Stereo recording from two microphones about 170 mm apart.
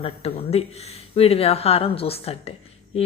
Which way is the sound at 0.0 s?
35° left (ahead or behind).